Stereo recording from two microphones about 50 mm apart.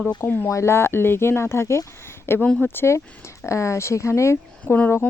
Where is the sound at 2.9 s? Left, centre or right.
Left.